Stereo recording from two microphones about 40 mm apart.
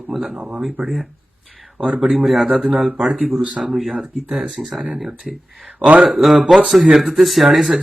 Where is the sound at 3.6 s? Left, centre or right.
Centre.